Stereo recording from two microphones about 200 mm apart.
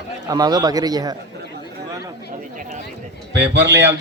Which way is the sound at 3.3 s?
60° right (ahead or behind).